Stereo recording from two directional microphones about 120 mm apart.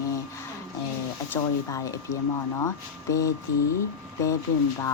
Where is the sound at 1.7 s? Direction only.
25° left (ahead or behind).